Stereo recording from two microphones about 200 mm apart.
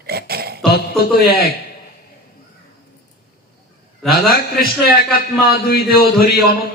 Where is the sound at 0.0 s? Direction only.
50° right (ahead or behind).